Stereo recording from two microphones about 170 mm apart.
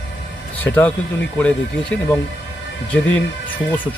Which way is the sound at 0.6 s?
10° left (ahead or behind).